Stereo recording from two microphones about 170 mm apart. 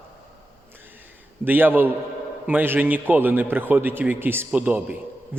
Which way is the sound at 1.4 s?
10° right (ahead or behind).